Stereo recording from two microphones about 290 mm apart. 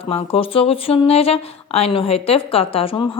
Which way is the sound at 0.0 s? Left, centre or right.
Centre.